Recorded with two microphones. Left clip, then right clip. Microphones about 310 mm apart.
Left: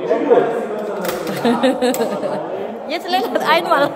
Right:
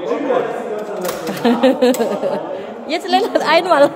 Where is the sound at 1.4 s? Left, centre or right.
Centre.